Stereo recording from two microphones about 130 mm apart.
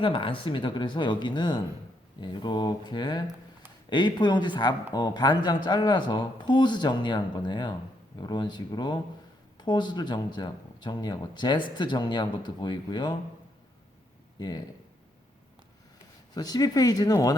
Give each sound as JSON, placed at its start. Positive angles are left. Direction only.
{"t": 0.0, "sound": "speech", "side_deg": 40}
{"t": 14.3, "sound": "speech", "side_deg": 30}
{"t": 16.3, "sound": "speech", "side_deg": 30}